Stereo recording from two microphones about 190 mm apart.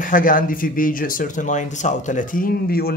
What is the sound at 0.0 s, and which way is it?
Speech, 45° left (ahead or behind).